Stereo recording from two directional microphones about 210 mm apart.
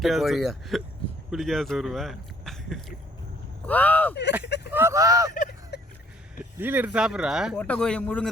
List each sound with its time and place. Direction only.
0.0 s speech: centre (ahead or behind)
4.1 s speech: 55° left (ahead or behind)
4.7 s speech: 10° right (ahead or behind)
5.7 s a sound: 50° left (ahead or behind)
6.6 s speech: 10° right (ahead or behind)